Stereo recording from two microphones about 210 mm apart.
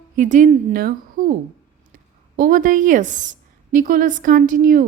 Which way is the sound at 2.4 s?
40° right (ahead or behind).